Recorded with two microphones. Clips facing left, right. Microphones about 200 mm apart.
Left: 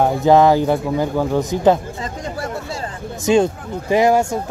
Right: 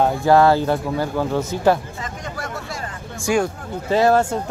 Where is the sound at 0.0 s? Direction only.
20° left (ahead or behind).